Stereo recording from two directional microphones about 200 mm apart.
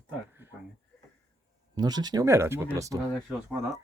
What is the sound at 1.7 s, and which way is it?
Speech, 20° right (ahead or behind).